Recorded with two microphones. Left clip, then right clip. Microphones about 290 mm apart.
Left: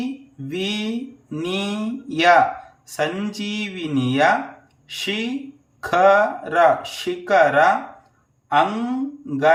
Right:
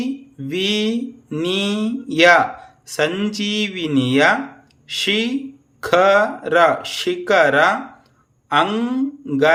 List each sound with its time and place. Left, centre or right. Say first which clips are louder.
0.0 s speech: right 4 dB; centre